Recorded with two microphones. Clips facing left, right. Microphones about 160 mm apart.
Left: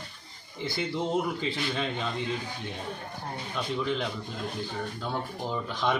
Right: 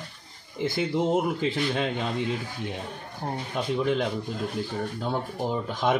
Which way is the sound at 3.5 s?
50° right (ahead or behind).